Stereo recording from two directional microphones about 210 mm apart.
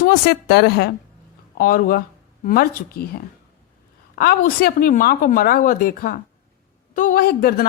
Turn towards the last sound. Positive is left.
turn(degrees=45)  # may be behind; listen again after turning